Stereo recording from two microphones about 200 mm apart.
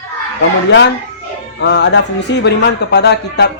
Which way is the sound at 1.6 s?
60° left (ahead or behind).